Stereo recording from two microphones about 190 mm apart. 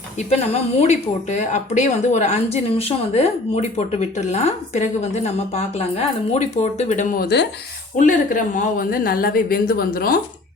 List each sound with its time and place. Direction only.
0.2 s speech: 35° left (ahead or behind); by 7.4 s 55° left (ahead or behind)
7.9 s a woman's voice: 45° left (ahead or behind)